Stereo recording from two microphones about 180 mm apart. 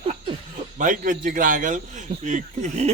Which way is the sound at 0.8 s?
45° right (ahead or behind).